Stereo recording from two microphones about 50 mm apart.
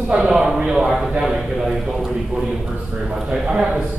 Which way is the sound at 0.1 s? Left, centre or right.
Centre.